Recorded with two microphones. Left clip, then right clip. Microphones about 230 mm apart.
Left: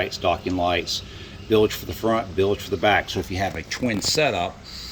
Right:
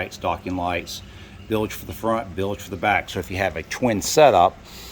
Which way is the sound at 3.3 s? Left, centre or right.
Centre.